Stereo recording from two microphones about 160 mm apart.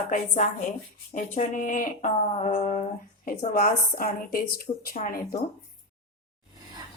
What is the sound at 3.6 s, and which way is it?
Speech, 65° left (ahead or behind).